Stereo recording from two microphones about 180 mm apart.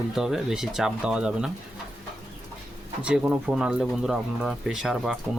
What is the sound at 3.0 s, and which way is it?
Speech, 5° right (ahead or behind).